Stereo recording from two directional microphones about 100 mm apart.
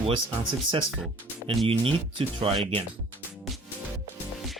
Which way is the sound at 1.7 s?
65° right (ahead or behind).